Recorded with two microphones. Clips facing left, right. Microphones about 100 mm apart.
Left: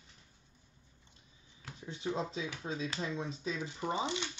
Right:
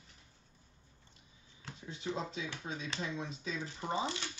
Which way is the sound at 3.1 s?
30° left (ahead or behind).